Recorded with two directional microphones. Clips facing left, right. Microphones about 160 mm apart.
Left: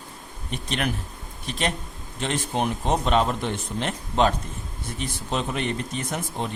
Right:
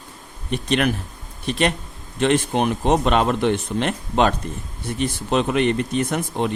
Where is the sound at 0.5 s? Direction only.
70° right (ahead or behind).